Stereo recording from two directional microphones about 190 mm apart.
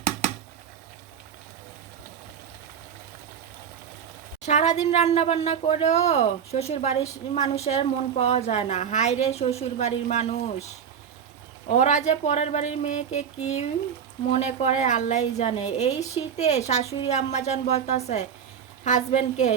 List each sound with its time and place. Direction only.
4.4 s speech: 35° left (ahead or behind)
11.7 s speech: 40° left (ahead or behind)